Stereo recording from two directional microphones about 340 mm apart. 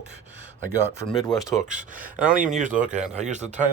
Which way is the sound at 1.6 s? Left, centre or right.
Right.